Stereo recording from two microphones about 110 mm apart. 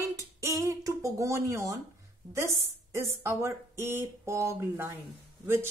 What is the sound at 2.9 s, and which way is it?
A woman's voice, 25° right (ahead or behind).